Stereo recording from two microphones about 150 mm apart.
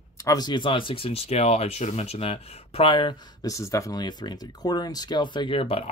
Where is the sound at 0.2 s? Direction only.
25° left (ahead or behind).